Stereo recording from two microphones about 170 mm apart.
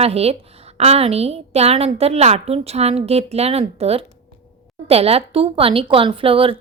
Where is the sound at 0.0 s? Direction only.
35° right (ahead or behind).